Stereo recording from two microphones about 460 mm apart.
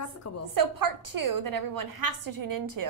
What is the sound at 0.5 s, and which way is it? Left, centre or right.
A woman's voice, right.